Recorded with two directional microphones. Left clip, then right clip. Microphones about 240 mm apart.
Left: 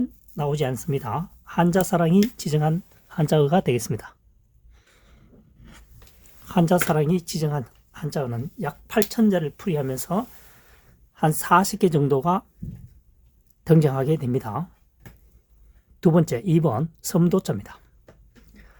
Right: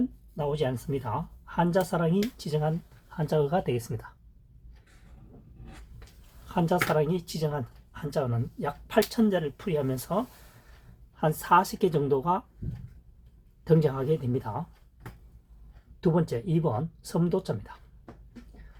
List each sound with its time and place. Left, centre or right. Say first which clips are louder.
0.3 s speech: left 4 dB; left
6.5 s speech: left 5 dB; left
13.7 s speech: left 4 dB; left
16.0 s speech: left 6 dB; left